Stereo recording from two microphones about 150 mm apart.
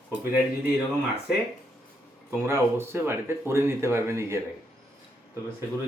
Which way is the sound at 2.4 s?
15° right (ahead or behind).